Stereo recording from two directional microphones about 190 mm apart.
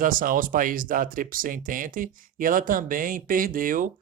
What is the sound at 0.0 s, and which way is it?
Speech, 45° right (ahead or behind).